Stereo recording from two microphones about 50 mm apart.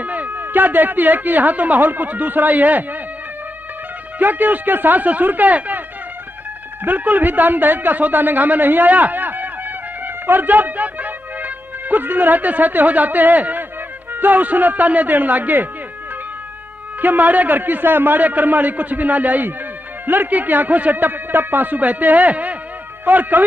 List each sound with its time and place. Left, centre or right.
0.0 s speech: right
4.2 s speech: right
6.8 s a man's voice: right
17.0 s speech: right